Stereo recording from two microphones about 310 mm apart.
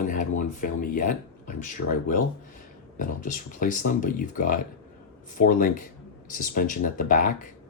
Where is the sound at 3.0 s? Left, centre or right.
Left.